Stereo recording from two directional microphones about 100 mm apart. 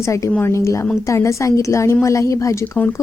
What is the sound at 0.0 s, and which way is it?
A woman's voice, 30° left (ahead or behind).